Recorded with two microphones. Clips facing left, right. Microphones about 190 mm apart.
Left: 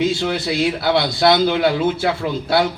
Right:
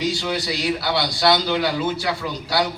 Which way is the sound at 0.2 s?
55° left (ahead or behind).